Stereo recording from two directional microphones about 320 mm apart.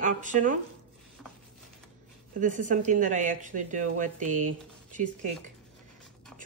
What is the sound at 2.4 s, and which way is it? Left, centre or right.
Speech, right.